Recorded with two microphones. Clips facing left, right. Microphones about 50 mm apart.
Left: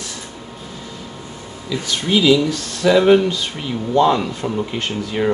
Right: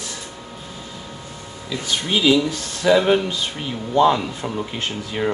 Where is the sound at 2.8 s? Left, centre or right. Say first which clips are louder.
Left 4 dB; centre.